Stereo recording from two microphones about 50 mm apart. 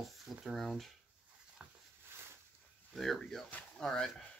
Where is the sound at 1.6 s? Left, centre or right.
Right.